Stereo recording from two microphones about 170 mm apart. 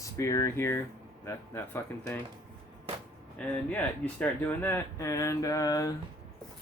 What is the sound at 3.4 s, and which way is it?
Speech, 10° left (ahead or behind).